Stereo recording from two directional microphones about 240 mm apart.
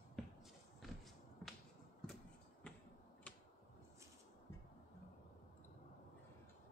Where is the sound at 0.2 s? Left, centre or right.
Centre.